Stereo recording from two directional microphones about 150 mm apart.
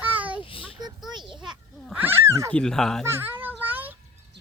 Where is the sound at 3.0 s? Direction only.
15° right (ahead or behind).